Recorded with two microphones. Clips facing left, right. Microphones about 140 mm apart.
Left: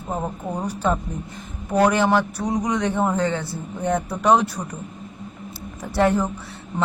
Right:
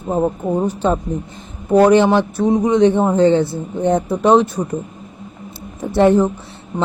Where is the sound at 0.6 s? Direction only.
25° right (ahead or behind).